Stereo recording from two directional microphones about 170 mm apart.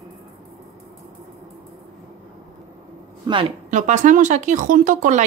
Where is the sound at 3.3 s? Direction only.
25° right (ahead or behind).